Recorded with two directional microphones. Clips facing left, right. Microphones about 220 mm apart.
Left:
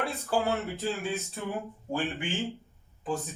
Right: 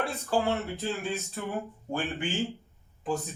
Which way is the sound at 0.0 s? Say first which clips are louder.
Right 1 dB; centre (ahead or behind).